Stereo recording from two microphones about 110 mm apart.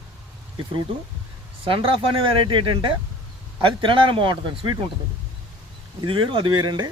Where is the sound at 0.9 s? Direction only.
55° right (ahead or behind).